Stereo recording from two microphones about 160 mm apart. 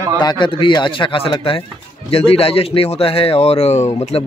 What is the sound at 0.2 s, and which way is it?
Speech, 30° left (ahead or behind).